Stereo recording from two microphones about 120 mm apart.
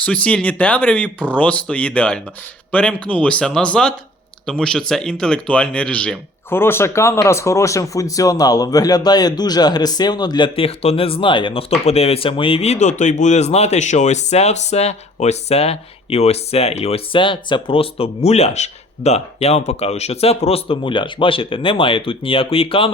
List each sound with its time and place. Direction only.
0.0 s speech: 10° left (ahead or behind); by 11.6 s 45° left (ahead or behind)
11.9 s speech: 60° left (ahead or behind)